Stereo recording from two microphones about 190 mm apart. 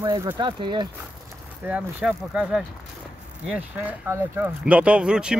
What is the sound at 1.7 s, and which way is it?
Speech, 5° right (ahead or behind).